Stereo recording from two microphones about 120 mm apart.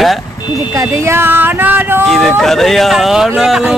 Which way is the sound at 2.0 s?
Centre (ahead or behind).